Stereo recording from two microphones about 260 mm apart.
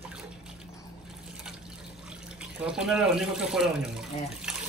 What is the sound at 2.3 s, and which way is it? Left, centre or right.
Speech, centre.